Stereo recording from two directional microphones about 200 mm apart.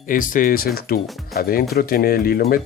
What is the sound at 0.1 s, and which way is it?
Speech, 45° left (ahead or behind).